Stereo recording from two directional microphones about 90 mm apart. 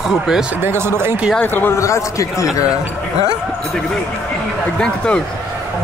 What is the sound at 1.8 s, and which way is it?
Speech, 35° left (ahead or behind).